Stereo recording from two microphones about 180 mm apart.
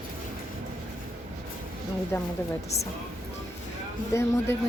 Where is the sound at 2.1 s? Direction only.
15° left (ahead or behind).